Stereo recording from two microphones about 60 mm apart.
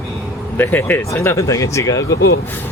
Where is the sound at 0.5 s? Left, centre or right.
Left.